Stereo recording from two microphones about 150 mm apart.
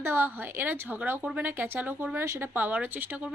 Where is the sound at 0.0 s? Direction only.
15° right (ahead or behind).